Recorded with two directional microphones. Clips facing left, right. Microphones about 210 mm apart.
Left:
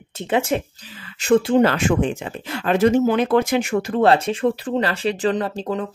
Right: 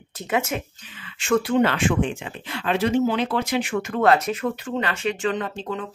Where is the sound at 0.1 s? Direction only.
30° left (ahead or behind).